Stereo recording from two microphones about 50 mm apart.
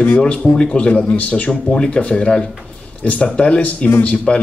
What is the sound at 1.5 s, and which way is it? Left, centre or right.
Speech, centre.